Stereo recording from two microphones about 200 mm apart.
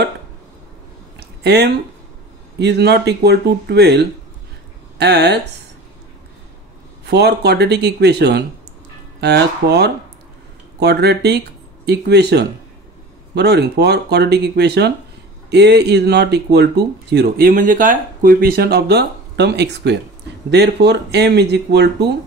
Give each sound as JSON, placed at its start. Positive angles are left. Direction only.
{"t": 1.4, "sound": "speech", "side_deg": -55}
{"t": 7.1, "sound": "speech", "side_deg": -55}